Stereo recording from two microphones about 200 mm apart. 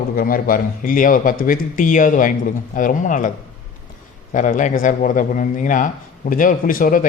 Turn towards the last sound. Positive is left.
turn(degrees=45)  # may be behind; listen again after turning